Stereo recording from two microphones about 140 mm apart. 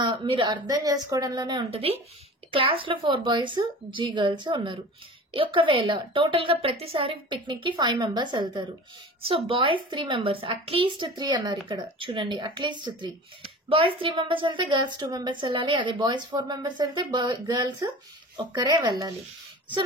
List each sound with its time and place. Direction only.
0.0 s speech: 35° right (ahead or behind)